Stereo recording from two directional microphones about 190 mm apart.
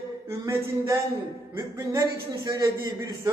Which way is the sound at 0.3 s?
15° right (ahead or behind).